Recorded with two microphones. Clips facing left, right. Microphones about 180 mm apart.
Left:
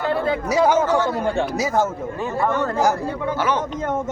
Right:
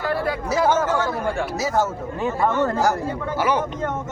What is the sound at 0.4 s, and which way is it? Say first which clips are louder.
Speech: left 2 dB; 15° left (ahead or behind).